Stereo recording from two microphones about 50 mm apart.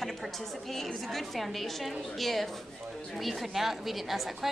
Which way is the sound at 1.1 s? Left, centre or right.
Centre.